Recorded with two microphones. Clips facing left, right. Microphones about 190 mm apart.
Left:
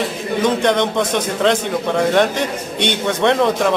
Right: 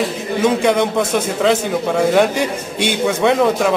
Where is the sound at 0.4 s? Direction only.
5° right (ahead or behind).